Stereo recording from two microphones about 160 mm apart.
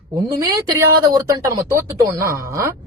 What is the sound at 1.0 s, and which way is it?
A woman's voice, 20° right (ahead or behind).